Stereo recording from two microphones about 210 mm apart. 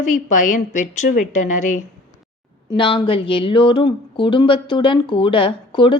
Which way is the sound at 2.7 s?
25° left (ahead or behind).